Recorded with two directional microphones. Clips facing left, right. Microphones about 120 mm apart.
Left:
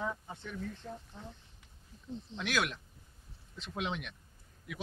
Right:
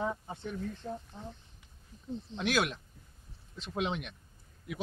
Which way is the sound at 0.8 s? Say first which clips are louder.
Right 5 dB; 35° right (ahead or behind).